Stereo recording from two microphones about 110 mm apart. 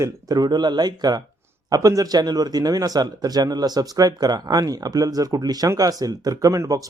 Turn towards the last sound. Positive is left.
turn(degrees=-30)  # may be behind; listen again after turning